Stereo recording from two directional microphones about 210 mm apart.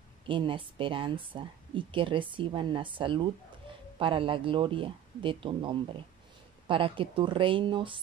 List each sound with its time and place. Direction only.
0.3 s speech: 25° right (ahead or behind)